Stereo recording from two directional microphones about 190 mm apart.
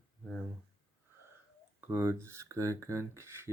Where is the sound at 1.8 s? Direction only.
10° right (ahead or behind).